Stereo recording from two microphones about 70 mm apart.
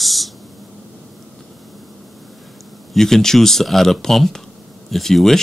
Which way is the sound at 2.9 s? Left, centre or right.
Centre.